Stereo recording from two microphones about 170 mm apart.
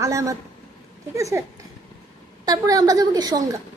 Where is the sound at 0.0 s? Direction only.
20° right (ahead or behind).